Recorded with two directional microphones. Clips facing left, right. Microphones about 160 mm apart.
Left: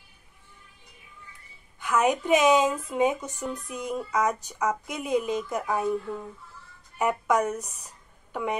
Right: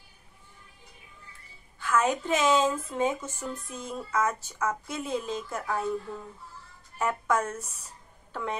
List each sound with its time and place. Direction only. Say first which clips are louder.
1.8 s a woman's voice: left 2 dB; 15° left (ahead or behind)